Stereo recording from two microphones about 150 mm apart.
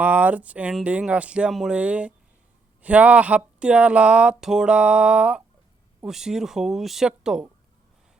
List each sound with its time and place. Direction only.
0.0 s speech: 10° right (ahead or behind)